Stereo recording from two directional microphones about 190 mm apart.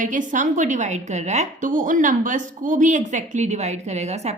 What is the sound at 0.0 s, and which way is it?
A woman's voice, 40° right (ahead or behind).